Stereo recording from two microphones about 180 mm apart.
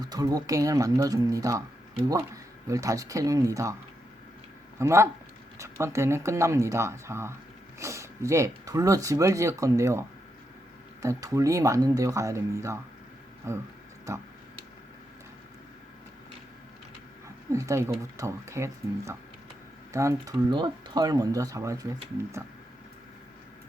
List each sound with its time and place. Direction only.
0.0 s speech: 20° right (ahead or behind)
4.8 s speech: 15° right (ahead or behind)
11.0 s speech: 15° right (ahead or behind)
17.5 s speech: 15° right (ahead or behind)